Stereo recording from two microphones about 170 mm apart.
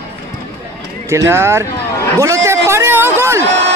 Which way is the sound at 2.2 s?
15° right (ahead or behind).